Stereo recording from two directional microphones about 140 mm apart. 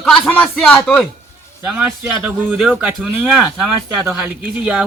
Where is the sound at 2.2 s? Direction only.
5° right (ahead or behind).